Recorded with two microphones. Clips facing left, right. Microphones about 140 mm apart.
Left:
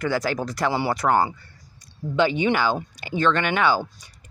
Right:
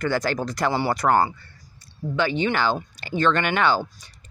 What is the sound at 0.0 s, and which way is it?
Speech, 5° left (ahead or behind).